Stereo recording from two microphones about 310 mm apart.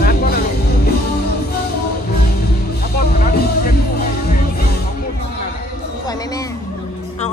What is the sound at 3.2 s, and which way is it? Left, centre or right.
Music, left.